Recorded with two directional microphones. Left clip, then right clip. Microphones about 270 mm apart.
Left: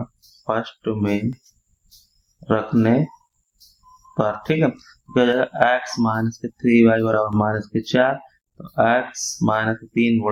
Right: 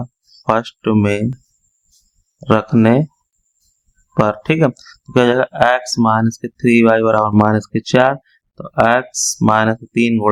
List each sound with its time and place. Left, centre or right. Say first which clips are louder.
0.4 s speech: right 7 dB; right
2.4 s speech: right 6 dB; right
4.1 s speech: right 5 dB; right